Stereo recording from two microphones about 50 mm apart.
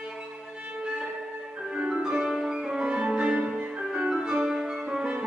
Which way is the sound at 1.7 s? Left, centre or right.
Right.